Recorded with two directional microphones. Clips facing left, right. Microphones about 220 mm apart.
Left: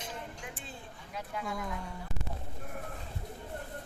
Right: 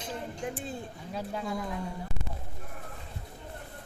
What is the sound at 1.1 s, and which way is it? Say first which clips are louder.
Speech: right 4 dB; 30° right (ahead or behind).